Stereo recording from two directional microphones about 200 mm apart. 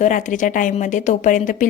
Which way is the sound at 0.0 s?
40° left (ahead or behind).